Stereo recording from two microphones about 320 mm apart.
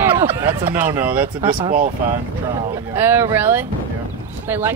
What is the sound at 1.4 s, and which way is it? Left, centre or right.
Speech, centre.